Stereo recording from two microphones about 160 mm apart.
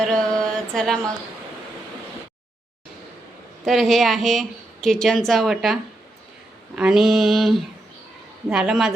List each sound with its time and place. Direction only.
0.0 s a sound: 5° left (ahead or behind)
0.5 s mantra: 5° left (ahead or behind)
3.6 s a woman's voice: centre (ahead or behind)